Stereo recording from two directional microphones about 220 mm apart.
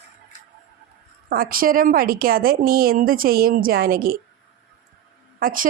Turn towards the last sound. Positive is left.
turn(degrees=-40)  # may be behind; listen again after turning